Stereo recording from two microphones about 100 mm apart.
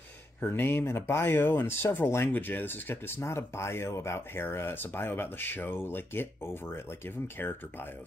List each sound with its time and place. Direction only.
0.4 s speech: 20° left (ahead or behind)